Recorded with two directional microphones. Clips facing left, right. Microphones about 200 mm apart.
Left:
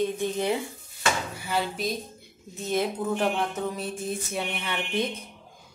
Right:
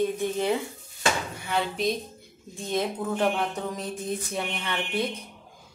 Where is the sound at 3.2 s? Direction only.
5° left (ahead or behind).